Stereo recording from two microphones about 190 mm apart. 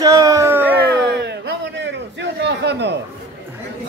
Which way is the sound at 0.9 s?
60° right (ahead or behind).